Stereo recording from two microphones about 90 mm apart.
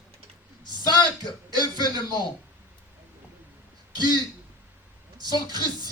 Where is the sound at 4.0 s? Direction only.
50° right (ahead or behind).